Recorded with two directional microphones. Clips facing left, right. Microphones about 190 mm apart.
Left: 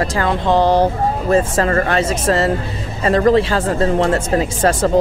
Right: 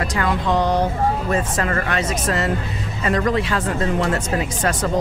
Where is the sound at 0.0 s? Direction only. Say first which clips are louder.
Left 4 dB; 30° left (ahead or behind).